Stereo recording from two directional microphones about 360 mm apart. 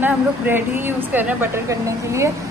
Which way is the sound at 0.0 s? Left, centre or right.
Centre.